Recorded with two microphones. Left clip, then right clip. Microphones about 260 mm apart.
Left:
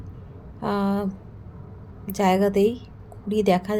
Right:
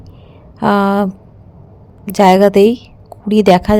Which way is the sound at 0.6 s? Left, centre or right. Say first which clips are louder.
Right 13 dB; right.